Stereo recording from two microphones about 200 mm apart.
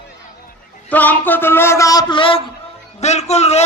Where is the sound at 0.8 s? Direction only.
10° left (ahead or behind).